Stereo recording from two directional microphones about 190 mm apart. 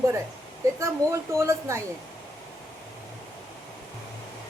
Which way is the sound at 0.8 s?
15° right (ahead or behind).